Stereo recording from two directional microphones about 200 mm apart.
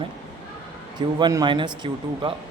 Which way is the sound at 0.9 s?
20° right (ahead or behind).